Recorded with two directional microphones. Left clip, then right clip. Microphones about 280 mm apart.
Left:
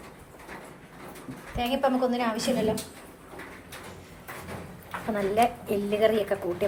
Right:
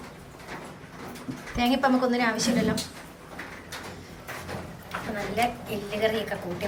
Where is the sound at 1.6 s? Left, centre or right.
Centre.